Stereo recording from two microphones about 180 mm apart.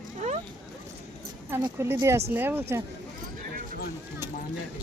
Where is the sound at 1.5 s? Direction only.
15° right (ahead or behind).